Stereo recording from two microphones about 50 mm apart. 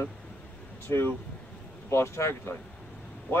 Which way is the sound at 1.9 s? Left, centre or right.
Left.